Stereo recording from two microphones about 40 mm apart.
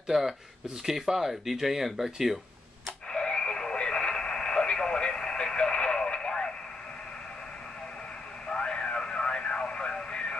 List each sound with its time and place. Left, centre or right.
0.1 s speech: centre
3.1 s radio: centre
8.5 s radio: left